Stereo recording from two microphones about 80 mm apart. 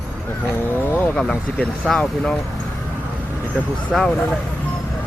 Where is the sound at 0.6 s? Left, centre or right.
Left.